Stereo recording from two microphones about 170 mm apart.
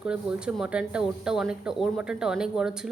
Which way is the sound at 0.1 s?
5° right (ahead or behind).